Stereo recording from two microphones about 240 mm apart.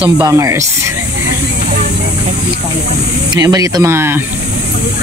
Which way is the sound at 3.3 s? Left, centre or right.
Centre.